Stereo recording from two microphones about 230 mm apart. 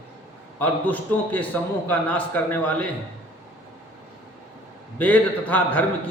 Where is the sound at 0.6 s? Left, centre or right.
Centre.